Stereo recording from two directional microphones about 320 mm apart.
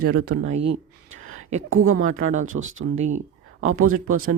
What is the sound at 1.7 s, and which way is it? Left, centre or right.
Speech, right.